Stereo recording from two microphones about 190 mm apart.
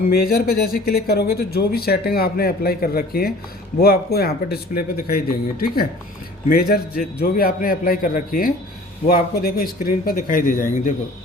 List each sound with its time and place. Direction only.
0.1 s speech: 55° left (ahead or behind)